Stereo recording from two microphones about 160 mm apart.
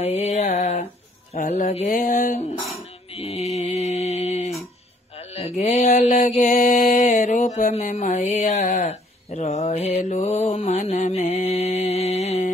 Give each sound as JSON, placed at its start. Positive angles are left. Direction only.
{"t": 0.0, "sound": "mantra", "side_deg": 45}
{"t": 1.3, "sound": "a sound", "side_deg": 50}
{"t": 3.3, "sound": "mantra", "side_deg": 0}
{"t": 3.7, "sound": "mantra", "side_deg": 45}